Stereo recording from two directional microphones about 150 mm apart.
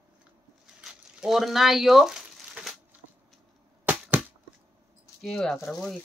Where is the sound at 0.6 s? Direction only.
5° right (ahead or behind).